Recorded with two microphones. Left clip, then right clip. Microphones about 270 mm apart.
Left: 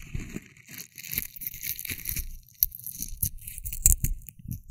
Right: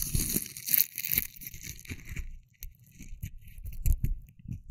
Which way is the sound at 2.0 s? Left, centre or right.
Left.